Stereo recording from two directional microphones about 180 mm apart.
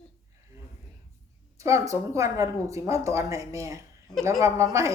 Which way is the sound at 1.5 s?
15° right (ahead or behind).